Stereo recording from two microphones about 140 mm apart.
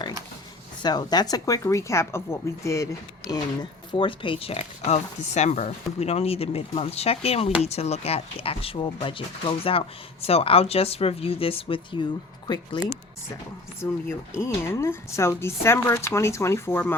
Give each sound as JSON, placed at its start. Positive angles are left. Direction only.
{"t": 0.8, "sound": "a woman's voice", "side_deg": 30}
{"t": 14.1, "sound": "speech", "side_deg": 20}